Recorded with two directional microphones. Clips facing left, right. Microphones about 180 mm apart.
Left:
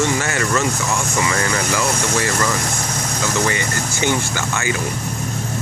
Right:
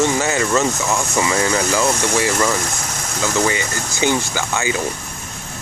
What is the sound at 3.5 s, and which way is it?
Speech, 15° right (ahead or behind).